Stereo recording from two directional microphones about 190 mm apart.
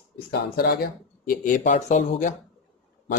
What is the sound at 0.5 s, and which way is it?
Speech, 55° left (ahead or behind).